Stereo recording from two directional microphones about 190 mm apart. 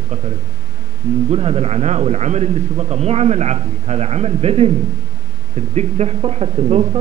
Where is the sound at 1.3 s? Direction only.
35° right (ahead or behind).